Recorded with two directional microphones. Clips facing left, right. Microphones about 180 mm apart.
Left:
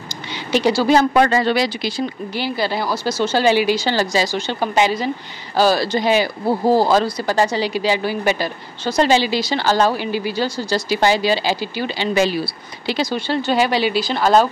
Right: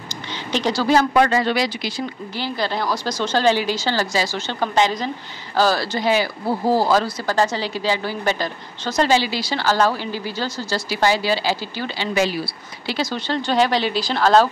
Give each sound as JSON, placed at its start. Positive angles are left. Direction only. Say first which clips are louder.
{"t": 0.5, "sound": "a woman's voice", "louder": "left 4 dB", "side_deg": 10}
{"t": 0.9, "sound": "speech", "louder": "right 1 dB", "side_deg": 30}
{"t": 2.3, "sound": "a woman's voice", "louder": "left 2 dB", "side_deg": 10}